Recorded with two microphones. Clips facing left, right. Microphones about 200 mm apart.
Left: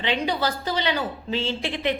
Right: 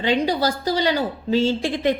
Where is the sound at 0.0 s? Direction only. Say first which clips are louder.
Right 5 dB; 40° right (ahead or behind).